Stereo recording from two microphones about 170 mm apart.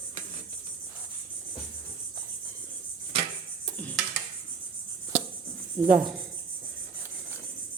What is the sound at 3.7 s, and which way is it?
Dishes, centre (ahead or behind).